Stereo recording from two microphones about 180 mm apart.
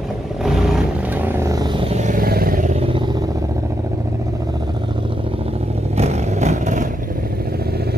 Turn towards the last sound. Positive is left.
turn(degrees=-40)  # may be behind; listen again after turning